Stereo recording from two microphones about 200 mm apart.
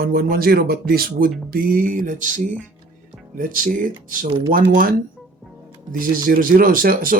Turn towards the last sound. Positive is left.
turn(degrees=-45)  # may be behind; listen again after turning